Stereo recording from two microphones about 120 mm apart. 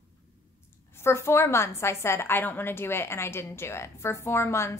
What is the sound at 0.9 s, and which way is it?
A woman's voice, 20° left (ahead or behind).